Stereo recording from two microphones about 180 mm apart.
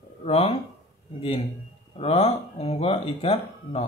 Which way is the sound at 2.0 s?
35° left (ahead or behind).